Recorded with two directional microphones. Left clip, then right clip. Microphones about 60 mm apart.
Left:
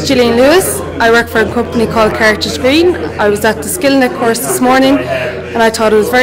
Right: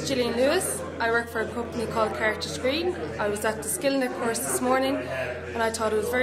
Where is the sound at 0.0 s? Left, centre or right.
Right.